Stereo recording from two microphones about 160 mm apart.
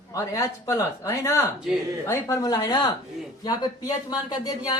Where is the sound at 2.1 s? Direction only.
20° left (ahead or behind).